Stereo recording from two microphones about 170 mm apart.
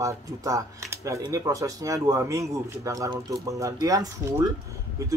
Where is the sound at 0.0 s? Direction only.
20° right (ahead or behind).